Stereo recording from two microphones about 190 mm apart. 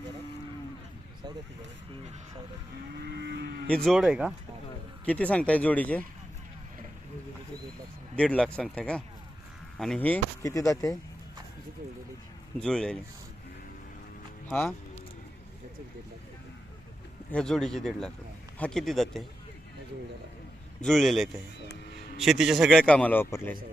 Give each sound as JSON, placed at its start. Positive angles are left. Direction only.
{"t": 2.9, "sound": "livestock", "side_deg": -65}
{"t": 3.8, "sound": "speech", "side_deg": -5}
{"t": 5.0, "sound": "speech", "side_deg": 5}
{"t": 8.1, "sound": "speech", "side_deg": 5}
{"t": 12.6, "sound": "speech", "side_deg": 5}
{"t": 14.5, "sound": "speech", "side_deg": 10}
{"t": 17.3, "sound": "speech", "side_deg": 5}
{"t": 20.8, "sound": "speech", "side_deg": 0}
{"t": 21.7, "sound": "music", "side_deg": 55}
{"t": 22.2, "sound": "speech", "side_deg": 0}